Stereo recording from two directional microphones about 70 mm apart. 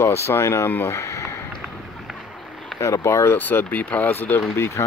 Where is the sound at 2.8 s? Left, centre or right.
Left.